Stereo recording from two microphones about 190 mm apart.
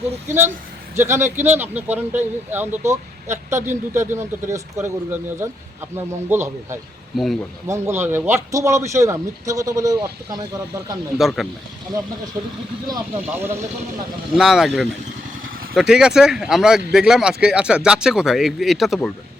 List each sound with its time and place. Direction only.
0.3 s a man's voice: 10° right (ahead or behind)
7.1 s speech: centre (ahead or behind)
7.7 s a man's voice: 10° right (ahead or behind)
11.2 s speech: centre (ahead or behind)
12.9 s a man's voice: 10° right (ahead or behind)
14.3 s speech: centre (ahead or behind)